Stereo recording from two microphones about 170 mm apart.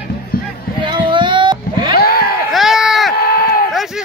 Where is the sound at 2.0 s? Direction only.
65° left (ahead or behind).